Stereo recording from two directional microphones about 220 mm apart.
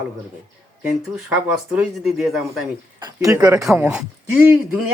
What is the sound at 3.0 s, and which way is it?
Speech, 15° right (ahead or behind).